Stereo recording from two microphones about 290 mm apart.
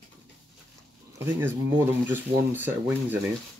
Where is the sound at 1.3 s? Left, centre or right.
Centre.